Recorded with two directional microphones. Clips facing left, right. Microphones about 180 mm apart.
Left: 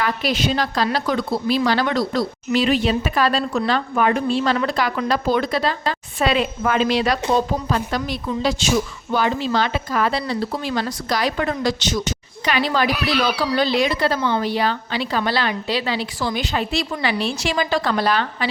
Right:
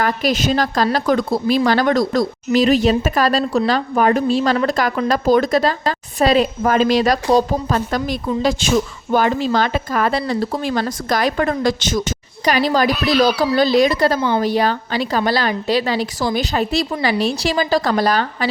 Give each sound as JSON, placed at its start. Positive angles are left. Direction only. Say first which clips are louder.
{"t": 0.0, "sound": "speech", "louder": "right 3 dB", "side_deg": -45}